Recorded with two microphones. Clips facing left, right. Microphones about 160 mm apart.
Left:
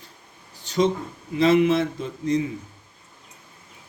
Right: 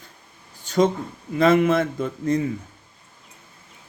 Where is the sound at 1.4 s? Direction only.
50° right (ahead or behind).